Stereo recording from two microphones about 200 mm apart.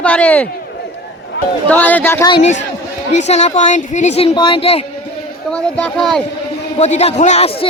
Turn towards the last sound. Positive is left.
turn(degrees=30)  # may be behind; listen again after turning